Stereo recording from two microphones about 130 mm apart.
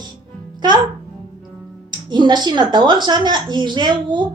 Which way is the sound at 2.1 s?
35° right (ahead or behind).